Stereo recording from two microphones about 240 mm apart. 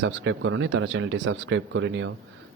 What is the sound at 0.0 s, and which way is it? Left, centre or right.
A man's voice, right.